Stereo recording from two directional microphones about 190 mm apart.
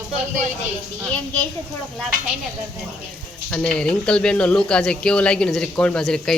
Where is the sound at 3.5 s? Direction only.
5° left (ahead or behind).